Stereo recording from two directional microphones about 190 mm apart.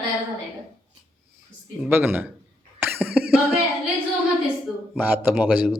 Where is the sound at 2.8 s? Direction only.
10° right (ahead or behind).